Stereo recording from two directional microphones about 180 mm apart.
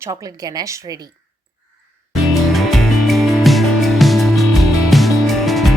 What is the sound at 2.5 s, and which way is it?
Music, centre (ahead or behind).